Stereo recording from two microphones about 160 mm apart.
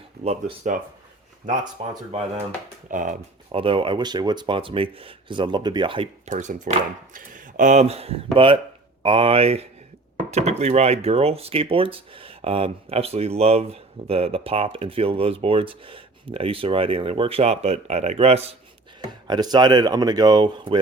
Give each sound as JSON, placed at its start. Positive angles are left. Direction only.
{"t": 0.3, "sound": "speech", "side_deg": -45}
{"t": 1.8, "sound": "speech", "side_deg": -35}
{"t": 2.9, "sound": "speech", "side_deg": -55}
{"t": 3.5, "sound": "speech", "side_deg": -35}
{"t": 6.2, "sound": "speech", "side_deg": -50}
{"t": 19.0, "sound": "speech", "side_deg": -25}